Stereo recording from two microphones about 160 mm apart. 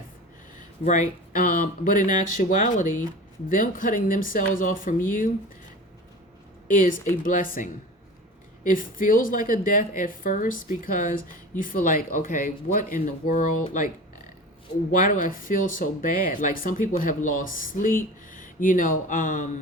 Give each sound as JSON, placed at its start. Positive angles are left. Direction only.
{"t": 0.9, "sound": "speech", "side_deg": 50}
{"t": 6.7, "sound": "speech", "side_deg": 60}
{"t": 14.9, "sound": "speech", "side_deg": 55}